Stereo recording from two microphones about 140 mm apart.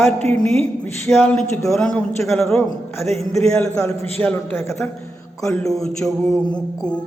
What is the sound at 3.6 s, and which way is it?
A man's voice, 20° left (ahead or behind).